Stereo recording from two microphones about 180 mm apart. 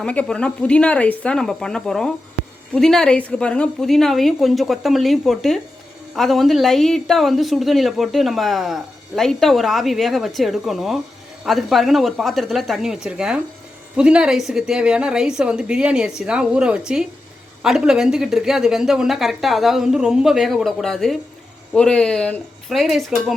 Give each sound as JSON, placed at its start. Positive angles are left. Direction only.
{"t": 0.0, "sound": "speech", "side_deg": 5}